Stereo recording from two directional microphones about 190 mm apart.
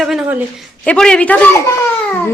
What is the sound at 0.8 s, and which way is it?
Speech, 5° left (ahead or behind).